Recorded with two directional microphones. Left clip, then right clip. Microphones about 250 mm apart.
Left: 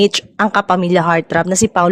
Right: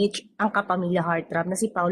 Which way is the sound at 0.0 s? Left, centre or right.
Left.